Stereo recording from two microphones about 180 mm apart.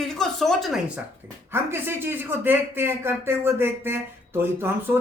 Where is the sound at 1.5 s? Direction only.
10° right (ahead or behind).